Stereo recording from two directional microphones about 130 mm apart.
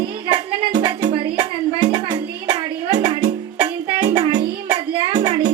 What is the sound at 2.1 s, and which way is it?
Music, 35° right (ahead or behind).